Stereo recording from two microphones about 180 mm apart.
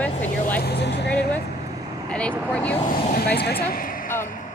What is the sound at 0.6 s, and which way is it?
Speech, 65° left (ahead or behind).